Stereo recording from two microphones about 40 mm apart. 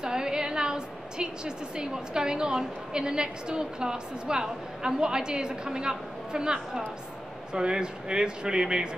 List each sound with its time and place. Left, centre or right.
0.0 s a woman's voice: centre